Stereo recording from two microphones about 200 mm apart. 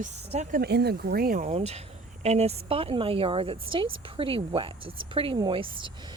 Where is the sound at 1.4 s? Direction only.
30° right (ahead or behind).